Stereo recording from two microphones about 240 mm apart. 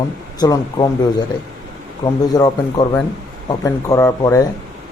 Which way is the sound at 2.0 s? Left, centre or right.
Centre.